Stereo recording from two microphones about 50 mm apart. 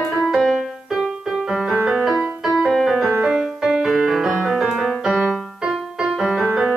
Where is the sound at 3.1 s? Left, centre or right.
Centre.